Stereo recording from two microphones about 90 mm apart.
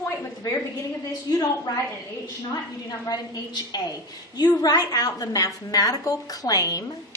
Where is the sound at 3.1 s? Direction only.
50° left (ahead or behind).